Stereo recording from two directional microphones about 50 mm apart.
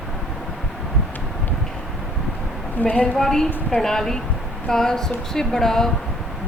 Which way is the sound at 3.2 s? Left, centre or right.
Centre.